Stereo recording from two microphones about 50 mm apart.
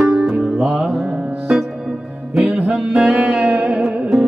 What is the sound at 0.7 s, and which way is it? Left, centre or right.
Music, right.